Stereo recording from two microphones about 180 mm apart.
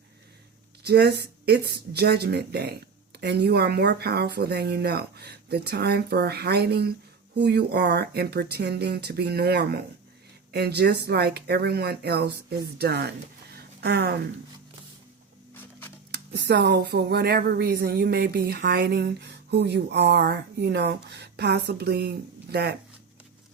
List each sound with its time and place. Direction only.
0.9 s speech: 65° right (ahead or behind)
16.1 s speech: 70° right (ahead or behind)